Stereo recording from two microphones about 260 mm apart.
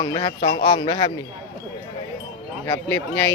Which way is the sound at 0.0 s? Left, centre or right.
Centre.